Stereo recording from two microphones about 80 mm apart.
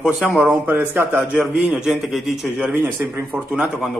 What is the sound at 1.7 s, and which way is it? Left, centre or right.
Speech, centre.